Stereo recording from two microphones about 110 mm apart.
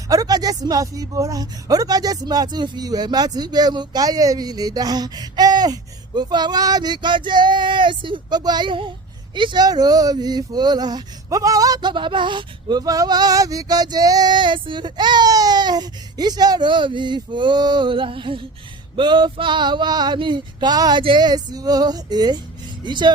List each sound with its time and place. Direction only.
0.1 s speech: 35° right (ahead or behind)
18.9 s male singing: 45° right (ahead or behind)
21.0 s speech: 45° right (ahead or behind)
22.8 s male singing: 45° right (ahead or behind)